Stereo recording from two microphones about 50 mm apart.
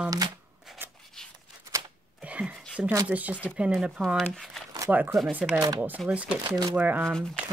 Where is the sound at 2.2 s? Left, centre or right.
Right.